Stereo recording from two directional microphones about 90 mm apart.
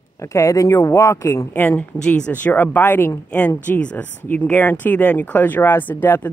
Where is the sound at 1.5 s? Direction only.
20° left (ahead or behind).